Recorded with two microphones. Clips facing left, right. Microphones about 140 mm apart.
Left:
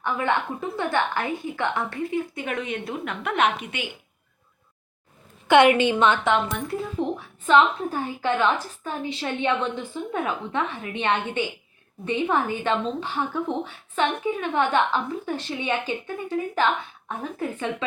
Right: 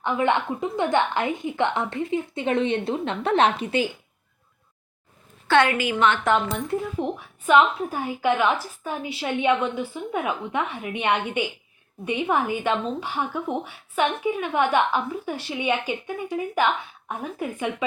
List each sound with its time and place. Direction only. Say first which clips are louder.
0.0 s a woman's voice: right 2 dB; 20° right (ahead or behind)
5.5 s a woman's voice: left 4 dB; 20° left (ahead or behind)
7.4 s a woman's voice: even; 10° right (ahead or behind)